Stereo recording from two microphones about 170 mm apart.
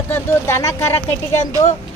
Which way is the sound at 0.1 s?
15° left (ahead or behind).